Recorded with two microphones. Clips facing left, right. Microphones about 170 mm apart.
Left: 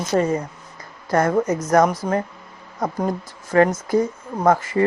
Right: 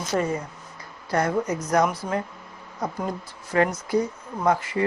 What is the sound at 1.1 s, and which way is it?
Speech, 45° left (ahead or behind).